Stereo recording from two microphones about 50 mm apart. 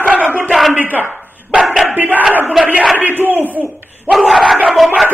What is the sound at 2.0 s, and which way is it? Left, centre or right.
Battle cry, right.